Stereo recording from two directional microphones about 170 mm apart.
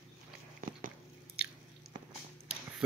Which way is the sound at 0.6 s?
55° right (ahead or behind).